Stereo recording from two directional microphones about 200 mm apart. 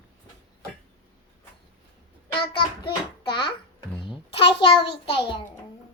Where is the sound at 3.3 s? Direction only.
25° left (ahead or behind).